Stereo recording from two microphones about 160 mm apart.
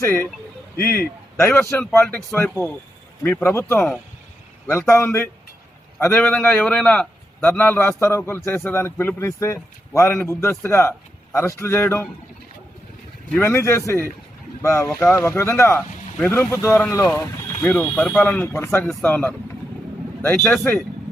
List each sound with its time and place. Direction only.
0.0 s a man's voice: 10° left (ahead or behind)
13.3 s a man's voice: 15° left (ahead or behind)